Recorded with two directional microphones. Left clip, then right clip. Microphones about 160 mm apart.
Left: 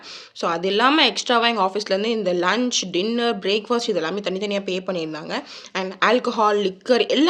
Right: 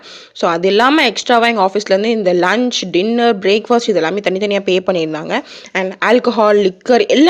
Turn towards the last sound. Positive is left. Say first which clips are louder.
# right 7 dB
turn(degrees=-45)  # may be behind; listen again after turning